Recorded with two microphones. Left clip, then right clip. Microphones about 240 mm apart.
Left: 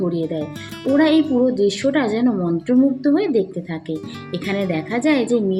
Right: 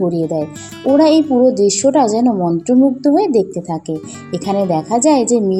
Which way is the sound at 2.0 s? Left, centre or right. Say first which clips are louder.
Right 6 dB; centre.